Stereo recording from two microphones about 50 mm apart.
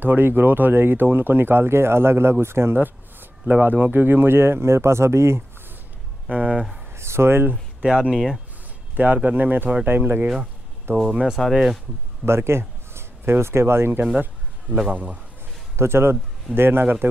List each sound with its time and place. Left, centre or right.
0.0 s speech: right
2.8 s a sound: right
3.6 s speech: right
6.2 s speech: right
7.0 s speech: right
7.8 s speech: centre
8.9 s speech: right
10.9 s speech: right
11.4 s speech: centre
12.3 s speech: right
14.9 s speech: right
15.7 s speech: right